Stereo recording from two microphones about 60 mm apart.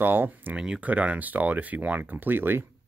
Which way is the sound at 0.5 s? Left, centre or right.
Centre.